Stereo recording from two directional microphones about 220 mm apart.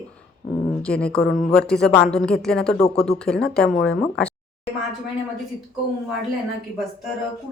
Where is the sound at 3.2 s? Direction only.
5° left (ahead or behind).